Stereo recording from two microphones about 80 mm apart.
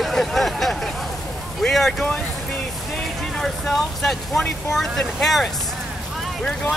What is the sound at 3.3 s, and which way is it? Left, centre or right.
Speech, centre.